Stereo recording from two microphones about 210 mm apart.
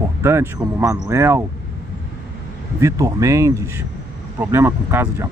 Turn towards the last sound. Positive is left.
turn(degrees=-10)  # may be behind; listen again after turning